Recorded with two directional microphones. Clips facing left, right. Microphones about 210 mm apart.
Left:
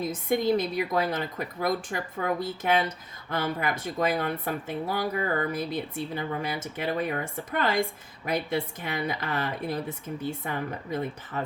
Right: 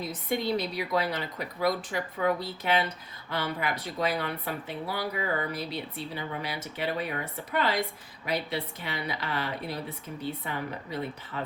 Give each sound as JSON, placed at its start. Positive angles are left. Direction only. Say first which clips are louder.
{"t": 0.0, "sound": "speech", "louder": "left 5 dB", "side_deg": 45}